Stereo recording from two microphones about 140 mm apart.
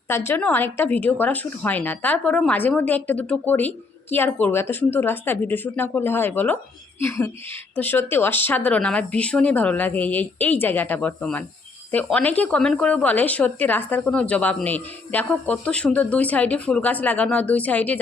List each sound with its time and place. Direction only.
0.3 s speech: 15° left (ahead or behind)